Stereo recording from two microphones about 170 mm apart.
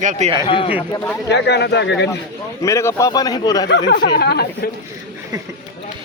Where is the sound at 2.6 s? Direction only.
15° left (ahead or behind).